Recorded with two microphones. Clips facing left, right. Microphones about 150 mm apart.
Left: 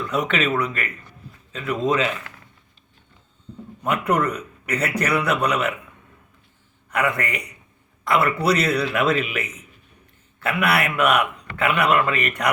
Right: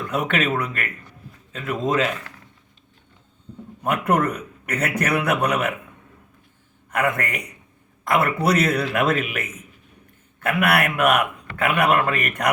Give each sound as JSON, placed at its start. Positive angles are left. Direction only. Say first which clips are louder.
{"t": 0.0, "sound": "a man's voice", "louder": "even", "side_deg": -50}
{"t": 3.8, "sound": "a man's voice", "louder": "right 1 dB", "side_deg": -50}
{"t": 6.9, "sound": "a man's voice", "louder": "even", "side_deg": -50}